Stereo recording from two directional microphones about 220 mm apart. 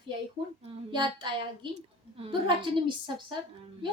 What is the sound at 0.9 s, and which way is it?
A woman's voice, 20° right (ahead or behind).